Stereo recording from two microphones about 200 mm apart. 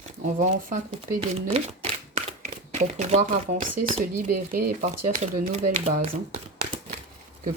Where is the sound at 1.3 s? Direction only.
30° right (ahead or behind).